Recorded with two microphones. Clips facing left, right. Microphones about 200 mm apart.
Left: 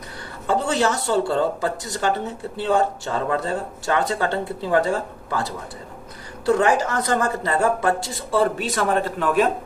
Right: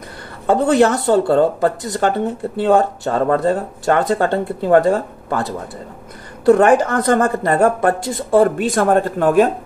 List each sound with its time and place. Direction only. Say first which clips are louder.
0.5 s a woman's voice: right 8 dB; 55° right (ahead or behind)